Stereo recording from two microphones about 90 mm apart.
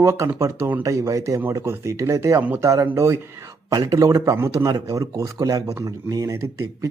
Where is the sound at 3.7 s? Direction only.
40° right (ahead or behind).